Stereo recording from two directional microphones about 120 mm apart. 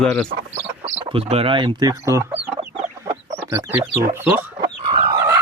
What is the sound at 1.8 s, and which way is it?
Speech, 20° right (ahead or behind).